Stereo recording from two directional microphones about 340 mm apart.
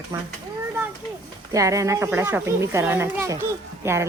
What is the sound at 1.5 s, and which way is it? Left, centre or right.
Speech, centre.